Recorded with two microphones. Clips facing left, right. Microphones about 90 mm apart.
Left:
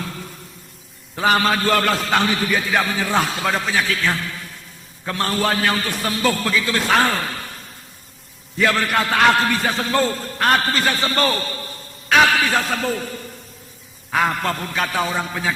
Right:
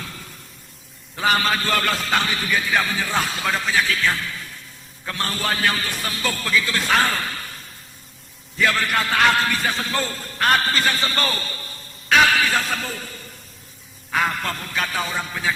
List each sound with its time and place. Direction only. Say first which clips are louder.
1.1 s a man's voice: left 3 dB; 40° left (ahead or behind)
8.6 s a man's voice: left 2 dB; 50° left (ahead or behind)
14.1 s a man's voice: left 3 dB; 45° left (ahead or behind)